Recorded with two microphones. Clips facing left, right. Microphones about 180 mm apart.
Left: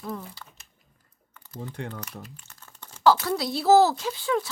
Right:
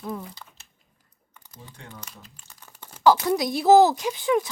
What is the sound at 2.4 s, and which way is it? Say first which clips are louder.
Speech: right 1 dB; 10° right (ahead or behind).